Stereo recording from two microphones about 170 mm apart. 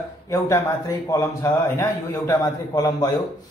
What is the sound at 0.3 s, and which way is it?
A man's voice, 20° left (ahead or behind).